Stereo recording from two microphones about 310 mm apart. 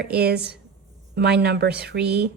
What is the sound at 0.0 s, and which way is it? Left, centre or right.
A woman's voice, right.